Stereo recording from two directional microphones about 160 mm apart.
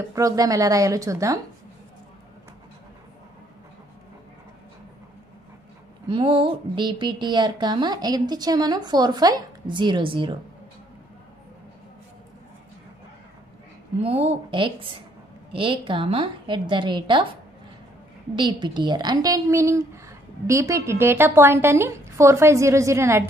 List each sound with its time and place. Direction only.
0.1 s a woman's voice: 20° right (ahead or behind)
6.0 s a woman's voice: 30° right (ahead or behind)
14.0 s a woman's voice: 40° right (ahead or behind); by 23.2 s 15° right (ahead or behind)